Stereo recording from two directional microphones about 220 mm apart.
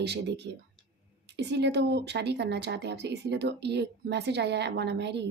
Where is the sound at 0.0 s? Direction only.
50° right (ahead or behind).